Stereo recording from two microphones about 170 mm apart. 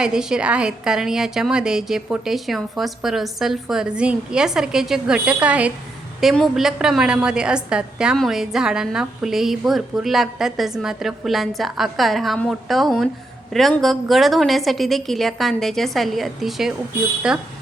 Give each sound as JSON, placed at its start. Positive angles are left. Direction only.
{"t": 0.0, "sound": "a woman's voice", "side_deg": -5}